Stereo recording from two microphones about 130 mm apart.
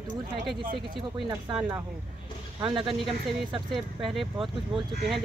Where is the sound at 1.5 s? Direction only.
40° right (ahead or behind).